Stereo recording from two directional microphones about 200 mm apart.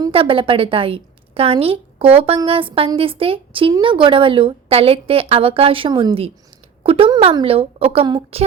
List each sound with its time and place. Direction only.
0.0 s a woman's voice: 25° right (ahead or behind)